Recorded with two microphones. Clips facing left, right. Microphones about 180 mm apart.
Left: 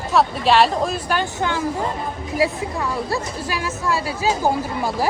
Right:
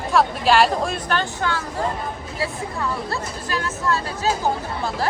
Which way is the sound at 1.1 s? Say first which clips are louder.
Left 2 dB; 20° left (ahead or behind).